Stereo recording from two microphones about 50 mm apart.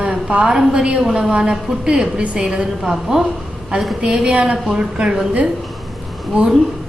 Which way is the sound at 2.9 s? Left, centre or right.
Centre.